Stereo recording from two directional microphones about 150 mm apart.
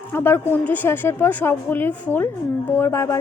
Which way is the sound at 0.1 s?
15° left (ahead or behind).